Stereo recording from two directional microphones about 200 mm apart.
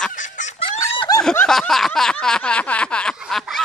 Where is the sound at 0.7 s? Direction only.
20° left (ahead or behind).